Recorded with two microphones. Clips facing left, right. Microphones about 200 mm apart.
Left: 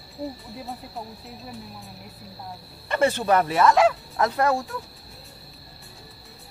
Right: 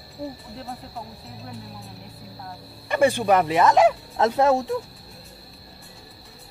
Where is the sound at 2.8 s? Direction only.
15° right (ahead or behind).